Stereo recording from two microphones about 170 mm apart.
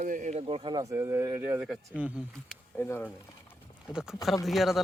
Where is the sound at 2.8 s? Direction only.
15° left (ahead or behind).